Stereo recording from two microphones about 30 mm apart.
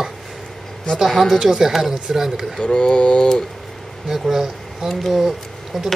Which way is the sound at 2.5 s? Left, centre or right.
Left.